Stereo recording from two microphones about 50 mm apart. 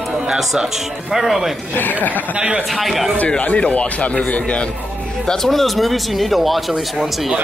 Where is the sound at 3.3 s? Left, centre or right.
Left.